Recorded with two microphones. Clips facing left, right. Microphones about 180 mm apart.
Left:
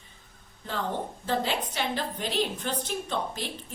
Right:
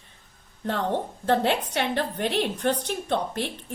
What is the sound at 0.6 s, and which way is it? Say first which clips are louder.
A woman's voice: right 5 dB; 65° right (ahead or behind).